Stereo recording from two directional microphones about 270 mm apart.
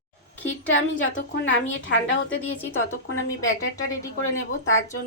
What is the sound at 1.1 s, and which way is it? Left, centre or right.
A woman's voice, left.